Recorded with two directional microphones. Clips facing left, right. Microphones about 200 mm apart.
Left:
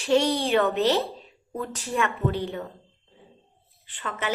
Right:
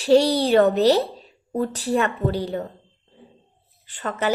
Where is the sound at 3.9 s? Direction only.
40° right (ahead or behind).